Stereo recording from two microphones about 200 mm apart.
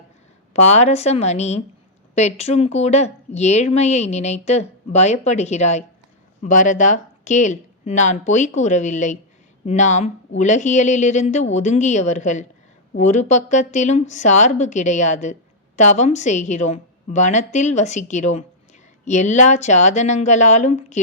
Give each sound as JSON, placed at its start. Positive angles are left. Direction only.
{"t": 0.5, "sound": "a woman's voice", "side_deg": 35}